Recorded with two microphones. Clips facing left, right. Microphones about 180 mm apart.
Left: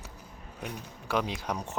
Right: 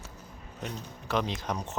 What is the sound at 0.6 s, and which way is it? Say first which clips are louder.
Speech: right 1 dB; 10° left (ahead or behind).